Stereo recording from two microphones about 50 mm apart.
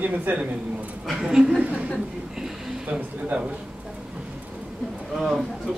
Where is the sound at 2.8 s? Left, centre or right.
Right.